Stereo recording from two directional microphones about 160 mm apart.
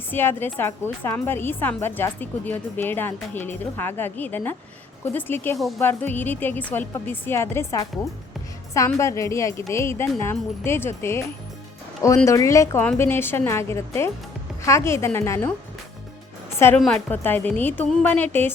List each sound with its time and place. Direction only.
0.1 s a woman's voice: 15° left (ahead or behind)
5.5 s speech: centre (ahead or behind)
5.8 s a woman's voice: 10° left (ahead or behind)
16.6 s a woman's voice: 15° left (ahead or behind)